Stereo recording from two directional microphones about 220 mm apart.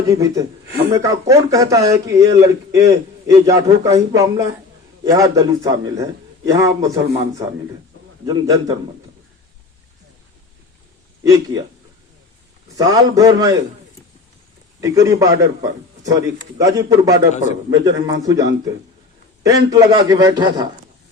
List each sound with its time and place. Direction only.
0.1 s a man's voice: 15° right (ahead or behind)
11.2 s a man's voice: 15° right (ahead or behind)
12.7 s a man's voice: 15° right (ahead or behind)
14.8 s a man's voice: 15° right (ahead or behind)